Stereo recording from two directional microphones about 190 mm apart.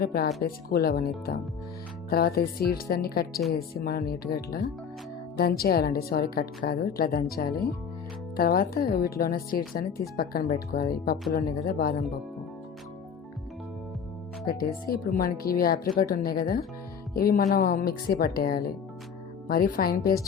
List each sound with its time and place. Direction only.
0.0 s a woman's voice: 55° left (ahead or behind)
14.4 s a woman's voice: 50° left (ahead or behind)